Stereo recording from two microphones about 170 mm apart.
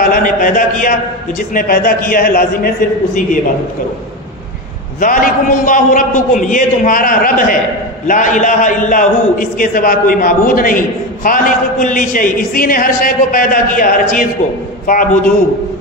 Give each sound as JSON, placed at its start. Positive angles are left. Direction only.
{"t": 0.0, "sound": "a sound", "side_deg": 55}
{"t": 1.5, "sound": "a man's voice", "side_deg": 60}
{"t": 5.0, "sound": "a man's voice", "side_deg": 55}